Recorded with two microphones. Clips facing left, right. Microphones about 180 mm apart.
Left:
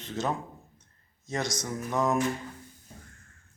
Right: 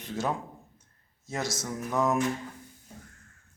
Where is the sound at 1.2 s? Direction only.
5° right (ahead or behind).